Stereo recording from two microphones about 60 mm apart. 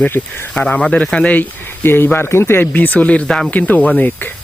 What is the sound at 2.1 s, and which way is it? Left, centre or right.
Speech, left.